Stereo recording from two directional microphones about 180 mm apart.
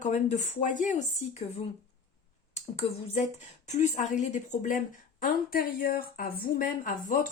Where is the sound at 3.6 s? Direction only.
40° left (ahead or behind).